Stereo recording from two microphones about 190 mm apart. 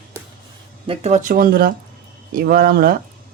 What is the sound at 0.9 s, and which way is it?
Speech, 35° right (ahead or behind).